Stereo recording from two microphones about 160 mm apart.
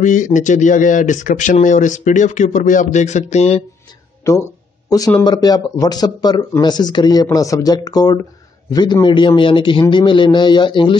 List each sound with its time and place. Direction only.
0.0 s speech: 50° left (ahead or behind)
4.2 s a sound: 20° left (ahead or behind)
5.2 s a man's voice: 25° left (ahead or behind)